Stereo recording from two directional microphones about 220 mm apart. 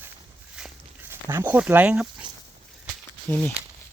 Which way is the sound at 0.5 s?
5° right (ahead or behind).